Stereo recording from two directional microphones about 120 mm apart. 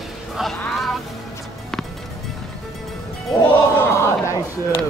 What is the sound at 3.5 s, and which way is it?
Music, 20° left (ahead or behind).